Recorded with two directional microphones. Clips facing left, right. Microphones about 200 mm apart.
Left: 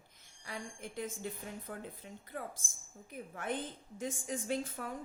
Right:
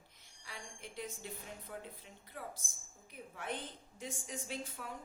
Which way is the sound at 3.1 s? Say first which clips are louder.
Left 4 dB; 50° left (ahead or behind).